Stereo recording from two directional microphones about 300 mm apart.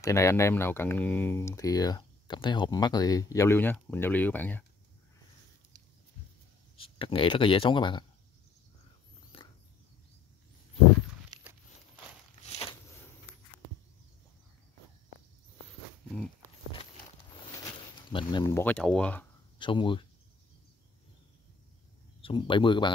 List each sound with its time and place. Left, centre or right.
0.0 s speech: centre
7.0 s speech: centre
9.3 s a sound: centre
11.3 s a sound: centre
18.1 s speech: centre
19.6 s speech: centre
22.2 s speech: centre